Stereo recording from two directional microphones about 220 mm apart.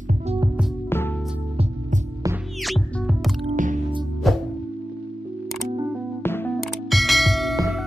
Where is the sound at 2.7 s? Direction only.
Centre (ahead or behind).